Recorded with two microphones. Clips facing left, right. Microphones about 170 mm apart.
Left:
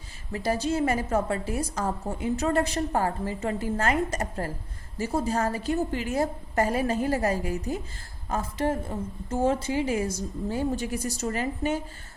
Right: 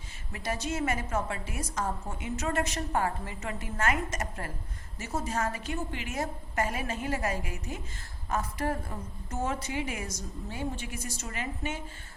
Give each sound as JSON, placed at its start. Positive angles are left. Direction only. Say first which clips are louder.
{"t": 0.3, "sound": "a woman's voice", "louder": "left 7 dB", "side_deg": 30}